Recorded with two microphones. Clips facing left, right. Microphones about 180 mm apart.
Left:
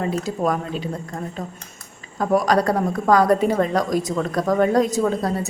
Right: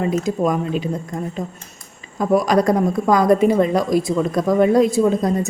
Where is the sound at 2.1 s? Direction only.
10° right (ahead or behind).